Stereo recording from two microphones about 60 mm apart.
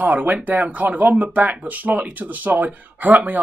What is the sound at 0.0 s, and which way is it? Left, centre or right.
Speech, right.